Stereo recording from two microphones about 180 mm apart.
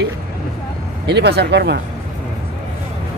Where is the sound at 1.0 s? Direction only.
65° right (ahead or behind).